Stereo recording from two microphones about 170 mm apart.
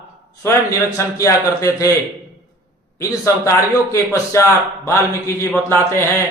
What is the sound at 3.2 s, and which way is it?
A man's voice, 15° left (ahead or behind).